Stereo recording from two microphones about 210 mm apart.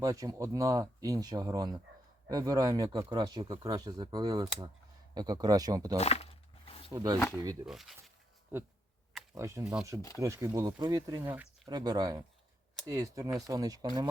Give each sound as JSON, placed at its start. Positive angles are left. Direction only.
{"t": 0.0, "sound": "speech", "side_deg": -15}
{"t": 6.0, "sound": "speech", "side_deg": 30}
{"t": 6.7, "sound": "a sound", "side_deg": 25}
{"t": 6.9, "sound": "speech", "side_deg": -20}
{"t": 7.6, "sound": "speech", "side_deg": 0}
{"t": 8.5, "sound": "speech", "side_deg": -10}